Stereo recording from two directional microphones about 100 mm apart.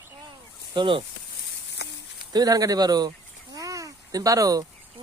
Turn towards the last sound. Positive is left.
turn(degrees=-35)  # may be behind; listen again after turning